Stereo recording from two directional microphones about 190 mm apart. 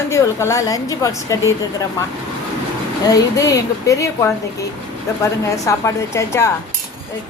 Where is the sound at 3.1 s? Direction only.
15° left (ahead or behind).